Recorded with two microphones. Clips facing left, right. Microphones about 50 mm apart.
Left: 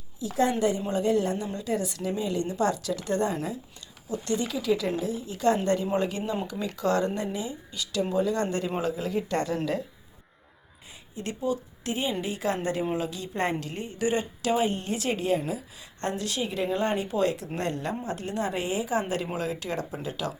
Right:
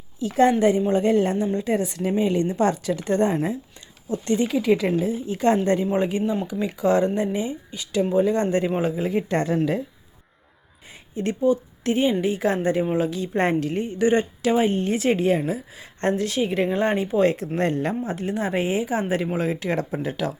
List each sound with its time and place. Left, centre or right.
0.2 s a woman's voice: right
0.9 s speech: right
11.1 s a woman's voice: right
16.6 s speech: right